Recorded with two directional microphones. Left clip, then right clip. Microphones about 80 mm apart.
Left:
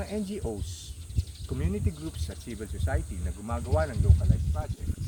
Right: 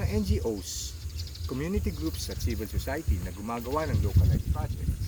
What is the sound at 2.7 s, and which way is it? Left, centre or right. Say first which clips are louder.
Speech: right 2 dB; centre.